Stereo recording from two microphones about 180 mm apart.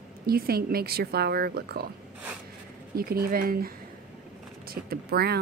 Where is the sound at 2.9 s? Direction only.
55° right (ahead or behind).